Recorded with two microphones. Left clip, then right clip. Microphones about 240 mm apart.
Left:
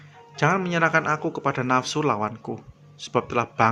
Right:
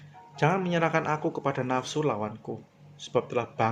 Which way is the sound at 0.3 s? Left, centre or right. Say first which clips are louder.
Left 4 dB; centre.